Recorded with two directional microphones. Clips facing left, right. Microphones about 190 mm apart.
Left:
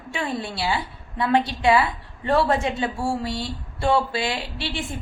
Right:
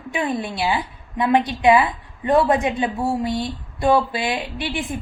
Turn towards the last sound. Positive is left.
turn(degrees=-20)  # may be behind; listen again after turning